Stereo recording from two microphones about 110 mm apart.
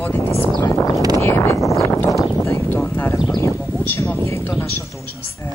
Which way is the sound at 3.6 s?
15° left (ahead or behind).